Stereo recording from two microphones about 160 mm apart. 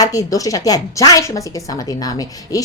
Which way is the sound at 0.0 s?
20° left (ahead or behind).